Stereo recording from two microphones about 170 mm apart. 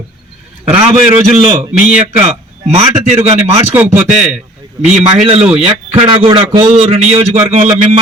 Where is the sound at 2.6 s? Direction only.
35° right (ahead or behind).